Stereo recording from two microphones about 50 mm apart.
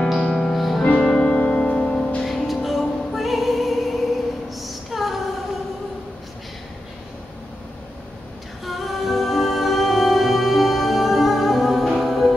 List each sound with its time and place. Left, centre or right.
0.3 s music: centre
0.8 s music: left
2.2 s music: centre
8.6 s music: centre